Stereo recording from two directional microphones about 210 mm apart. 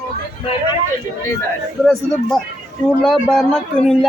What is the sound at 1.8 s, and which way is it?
A man's voice, centre (ahead or behind).